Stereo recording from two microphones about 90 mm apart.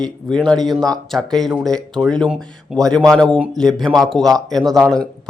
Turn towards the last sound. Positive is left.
turn(degrees=5)  # may be behind; listen again after turning